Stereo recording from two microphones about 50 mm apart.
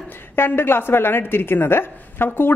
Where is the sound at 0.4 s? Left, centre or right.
Left.